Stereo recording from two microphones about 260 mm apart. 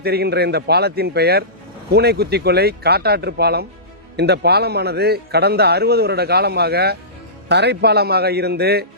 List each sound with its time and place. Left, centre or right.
0.0 s a man's voice: right